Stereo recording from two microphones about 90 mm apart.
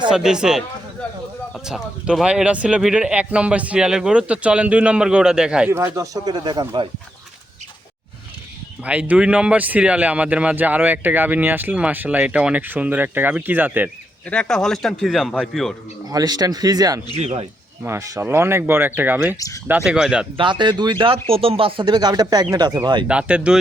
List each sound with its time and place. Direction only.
0.1 s a man's voice: 5° right (ahead or behind)
1.6 s a man's voice: 5° right (ahead or behind)
5.7 s speech: 35° right (ahead or behind)
6.2 s speech: 55° right (ahead or behind)
8.8 s a man's voice: 15° right (ahead or behind)
14.3 s speech: 10° left (ahead or behind)
16.0 s speech: 45° right (ahead or behind)
17.8 s speech: 35° right (ahead or behind)
19.8 s a man's voice: 10° right (ahead or behind)
20.3 s speech: 65° right (ahead or behind)
23.0 s a man's voice: 10° right (ahead or behind)